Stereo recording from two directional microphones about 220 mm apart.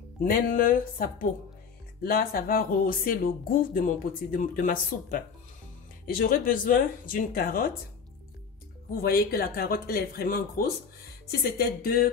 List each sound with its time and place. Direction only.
0.2 s speech: 40° left (ahead or behind)
8.9 s speech: 45° left (ahead or behind)